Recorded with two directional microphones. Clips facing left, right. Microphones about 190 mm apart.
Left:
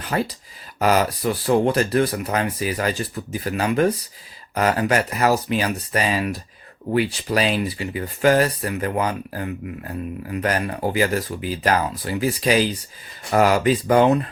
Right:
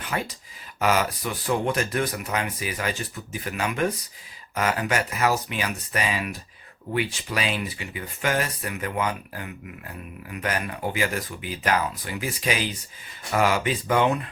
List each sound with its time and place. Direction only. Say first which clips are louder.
0.0 s speech: left 6 dB; 35° left (ahead or behind)